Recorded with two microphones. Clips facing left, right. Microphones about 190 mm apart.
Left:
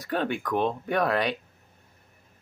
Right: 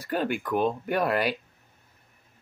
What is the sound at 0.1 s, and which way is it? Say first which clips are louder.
Speech: even; 5° right (ahead or behind).